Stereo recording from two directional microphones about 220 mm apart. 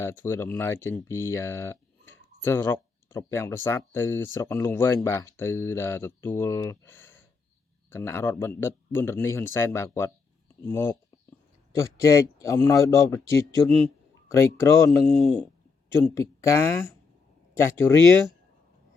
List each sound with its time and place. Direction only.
0.0 s speech: 10° left (ahead or behind)